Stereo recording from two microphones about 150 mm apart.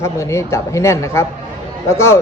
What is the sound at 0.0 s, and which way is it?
A man's voice, 20° left (ahead or behind).